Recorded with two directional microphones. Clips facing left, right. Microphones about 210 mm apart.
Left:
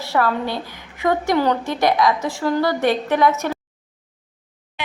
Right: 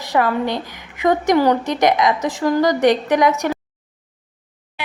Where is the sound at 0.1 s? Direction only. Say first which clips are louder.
Right 2 dB; 15° right (ahead or behind).